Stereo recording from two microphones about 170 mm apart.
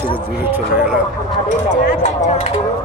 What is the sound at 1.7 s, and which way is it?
Speech, 45° left (ahead or behind).